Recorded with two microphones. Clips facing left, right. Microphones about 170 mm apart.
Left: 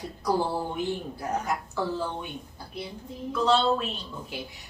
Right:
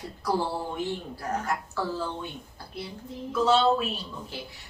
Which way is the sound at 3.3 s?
5° right (ahead or behind).